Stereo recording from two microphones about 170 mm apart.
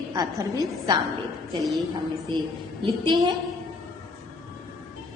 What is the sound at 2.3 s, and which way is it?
Speech, 25° right (ahead or behind).